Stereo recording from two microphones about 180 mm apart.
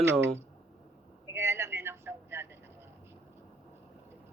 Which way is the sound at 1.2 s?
15° right (ahead or behind).